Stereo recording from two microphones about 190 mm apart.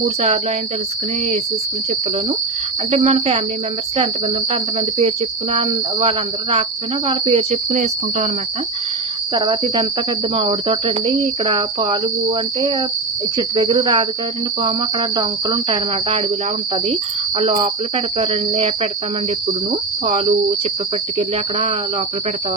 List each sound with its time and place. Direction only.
0.0 s cricket: 35° right (ahead or behind)
2.9 s cricket: 35° right (ahead or behind)
4.9 s cricket: 30° right (ahead or behind)
9.3 s cricket: 25° right (ahead or behind)
13.3 s cricket: 25° right (ahead or behind)
15.1 s cricket: 25° right (ahead or behind)
17.4 s cricket: 30° right (ahead or behind)
20.1 s cricket: 30° right (ahead or behind)